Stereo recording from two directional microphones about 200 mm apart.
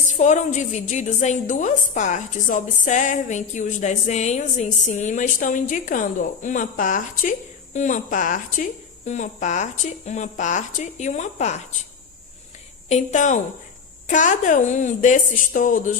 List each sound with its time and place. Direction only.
0.1 s a woman's voice: 35° left (ahead or behind)
12.9 s a woman's voice: 35° left (ahead or behind)